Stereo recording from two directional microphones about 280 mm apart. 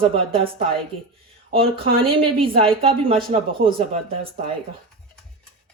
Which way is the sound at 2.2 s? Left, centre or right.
Centre.